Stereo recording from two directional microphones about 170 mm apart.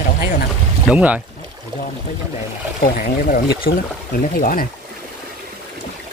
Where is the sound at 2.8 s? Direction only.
50° left (ahead or behind).